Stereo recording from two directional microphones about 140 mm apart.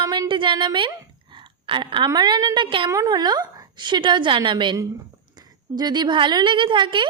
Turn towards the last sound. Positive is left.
turn(degrees=-35)  # may be behind; listen again after turning